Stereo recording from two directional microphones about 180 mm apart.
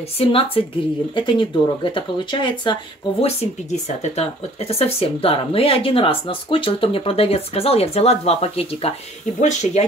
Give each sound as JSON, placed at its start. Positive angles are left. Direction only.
{"t": 0.2, "sound": "speech", "side_deg": 30}